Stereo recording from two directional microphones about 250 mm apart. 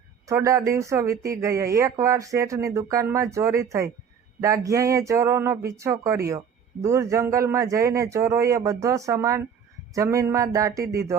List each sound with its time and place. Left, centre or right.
0.3 s speech: centre